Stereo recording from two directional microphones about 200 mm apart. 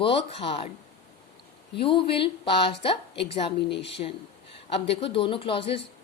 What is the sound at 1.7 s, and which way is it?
Speech, 25° left (ahead or behind).